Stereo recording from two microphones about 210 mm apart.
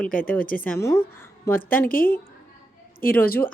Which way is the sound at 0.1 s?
40° left (ahead or behind).